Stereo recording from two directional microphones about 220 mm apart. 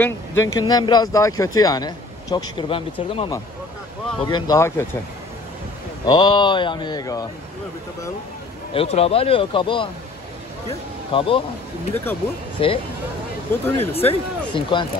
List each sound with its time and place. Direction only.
0.0 s speech: 10° left (ahead or behind)
6.0 s speech: 20° left (ahead or behind)
8.7 s speech: 25° left (ahead or behind)
11.1 s speech: 25° left (ahead or behind)
11.9 s speech: 10° left (ahead or behind)
12.6 s speech: 25° left (ahead or behind)
13.9 s speech: 25° left (ahead or behind)